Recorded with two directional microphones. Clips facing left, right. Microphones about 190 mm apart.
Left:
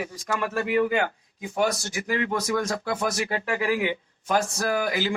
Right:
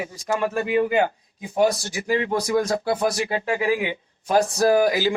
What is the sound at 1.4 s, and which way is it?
A man's voice, 30° right (ahead or behind).